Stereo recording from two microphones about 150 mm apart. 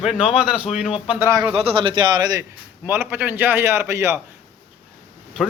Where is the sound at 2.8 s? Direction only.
15° right (ahead or behind).